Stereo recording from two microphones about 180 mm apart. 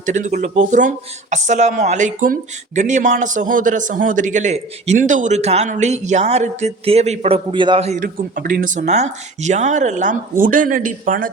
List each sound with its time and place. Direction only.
0.0 s speech: 45° right (ahead or behind)
7.9 s speech: 50° right (ahead or behind)